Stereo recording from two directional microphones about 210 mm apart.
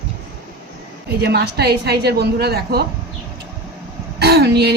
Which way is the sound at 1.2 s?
50° right (ahead or behind).